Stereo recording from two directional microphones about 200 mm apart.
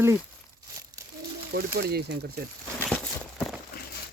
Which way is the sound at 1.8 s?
50° right (ahead or behind).